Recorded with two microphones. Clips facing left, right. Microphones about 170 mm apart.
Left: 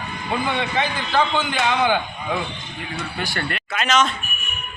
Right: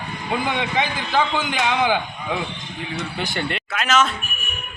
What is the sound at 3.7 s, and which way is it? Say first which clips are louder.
Speech: even; centre (ahead or behind).